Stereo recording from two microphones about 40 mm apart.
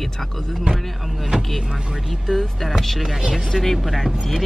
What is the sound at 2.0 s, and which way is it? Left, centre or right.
Speech, centre.